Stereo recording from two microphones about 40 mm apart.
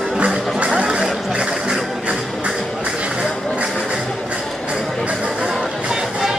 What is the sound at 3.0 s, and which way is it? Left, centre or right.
Music, right.